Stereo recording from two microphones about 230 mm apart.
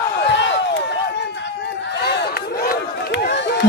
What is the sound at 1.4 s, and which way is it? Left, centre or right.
Run, left.